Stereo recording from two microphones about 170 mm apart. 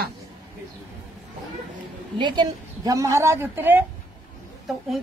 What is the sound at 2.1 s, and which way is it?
A woman's voice, 25° right (ahead or behind).